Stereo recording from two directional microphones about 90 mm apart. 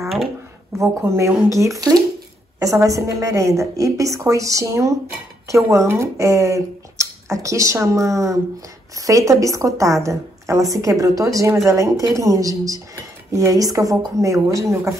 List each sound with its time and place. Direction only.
0.7 s speech: 35° right (ahead or behind)